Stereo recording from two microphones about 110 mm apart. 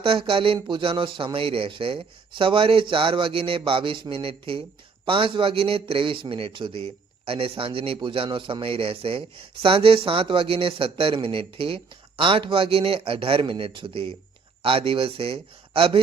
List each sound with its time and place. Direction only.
0.0 s speech: 55° right (ahead or behind)